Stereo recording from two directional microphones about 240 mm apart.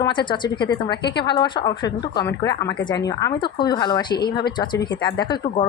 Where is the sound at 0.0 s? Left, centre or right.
Centre.